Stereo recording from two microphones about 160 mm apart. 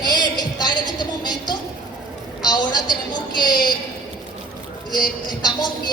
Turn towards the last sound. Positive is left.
turn(degrees=25)  # may be behind; listen again after turning